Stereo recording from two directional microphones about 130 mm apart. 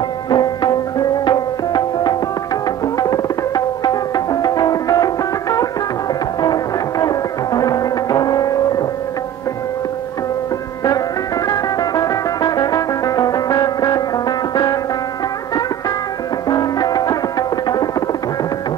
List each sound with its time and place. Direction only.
0.3 s music: 35° left (ahead or behind)
11.4 s music: 30° left (ahead or behind)
16.4 s music: 30° left (ahead or behind)